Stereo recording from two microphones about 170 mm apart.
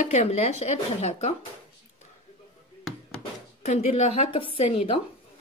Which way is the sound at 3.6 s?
40° left (ahead or behind).